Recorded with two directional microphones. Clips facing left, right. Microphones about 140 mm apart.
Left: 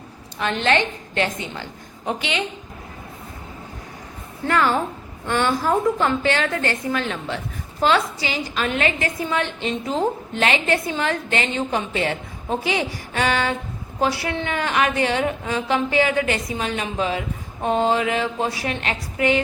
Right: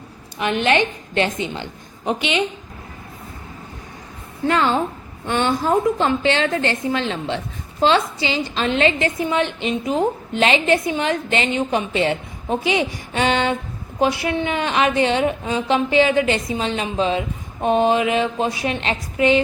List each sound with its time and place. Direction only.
0.3 s a woman's voice: 15° right (ahead or behind)
4.4 s a woman's voice: 20° right (ahead or behind)